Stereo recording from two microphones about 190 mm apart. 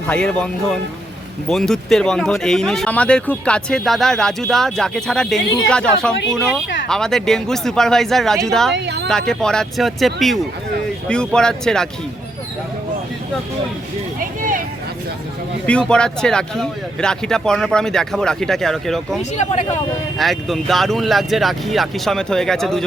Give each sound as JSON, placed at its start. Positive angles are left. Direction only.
{"t": 0.1, "sound": "speech", "side_deg": 5}
{"t": 8.7, "sound": "speech", "side_deg": -60}
{"t": 9.0, "sound": "speech", "side_deg": 5}
{"t": 15.6, "sound": "speech", "side_deg": 5}